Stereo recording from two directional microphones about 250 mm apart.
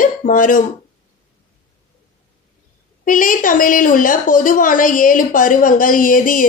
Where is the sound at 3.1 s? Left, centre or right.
Left.